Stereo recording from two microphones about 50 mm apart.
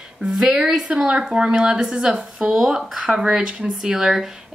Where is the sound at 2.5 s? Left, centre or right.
Centre.